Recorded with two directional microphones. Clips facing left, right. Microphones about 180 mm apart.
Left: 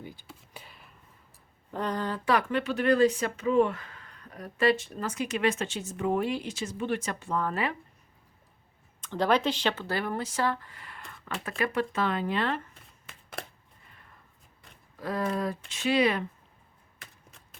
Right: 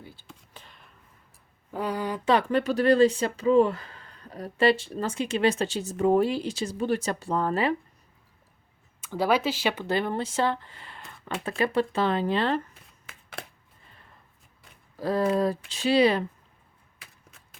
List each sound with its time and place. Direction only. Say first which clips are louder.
0.0 s a sound: left 3 dB; 15° left (ahead or behind)
1.7 s speech: right 2 dB; 10° right (ahead or behind)
2.5 s speech: right 4 dB; 40° right (ahead or behind)
9.0 s speech: right 1 dB; 10° right (ahead or behind)
9.8 s speech: right 4 dB; 20° right (ahead or behind)
13.1 s a sound: left 1 dB; 5° right (ahead or behind)
14.9 s speech: right 6 dB; 30° right (ahead or behind)
17.0 s chop: left 1 dB; centre (ahead or behind)